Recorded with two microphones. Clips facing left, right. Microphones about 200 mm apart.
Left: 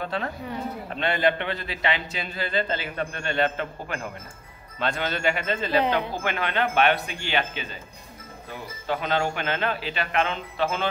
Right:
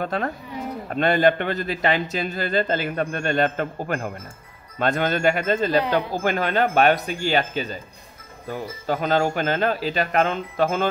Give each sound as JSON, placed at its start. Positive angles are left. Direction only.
{"t": 0.0, "sound": "a man's voice", "side_deg": -50}